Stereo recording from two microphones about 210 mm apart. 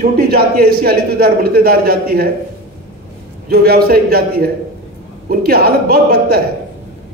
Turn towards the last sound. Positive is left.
turn(degrees=-45)  # may be behind; listen again after turning